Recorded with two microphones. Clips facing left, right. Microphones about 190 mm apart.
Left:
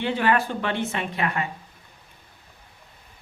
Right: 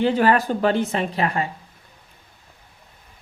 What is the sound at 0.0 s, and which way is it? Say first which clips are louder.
Speech: right 5 dB; 40° right (ahead or behind).